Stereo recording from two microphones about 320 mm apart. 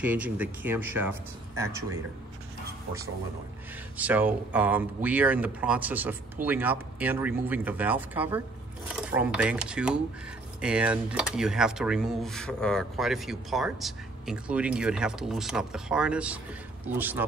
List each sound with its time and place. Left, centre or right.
0.0 s speech: centre
3.9 s speech: centre